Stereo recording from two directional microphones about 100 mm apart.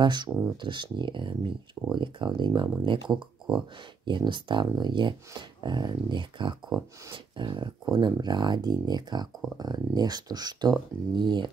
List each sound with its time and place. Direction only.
0.0 s speech: 45° right (ahead or behind)